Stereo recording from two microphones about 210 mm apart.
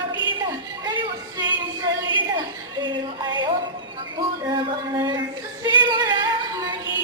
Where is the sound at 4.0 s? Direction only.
20° right (ahead or behind).